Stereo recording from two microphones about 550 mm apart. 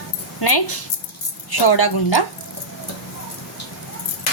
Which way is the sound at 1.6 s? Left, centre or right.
Left.